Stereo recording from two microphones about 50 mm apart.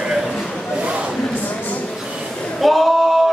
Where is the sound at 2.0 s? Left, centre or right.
Centre.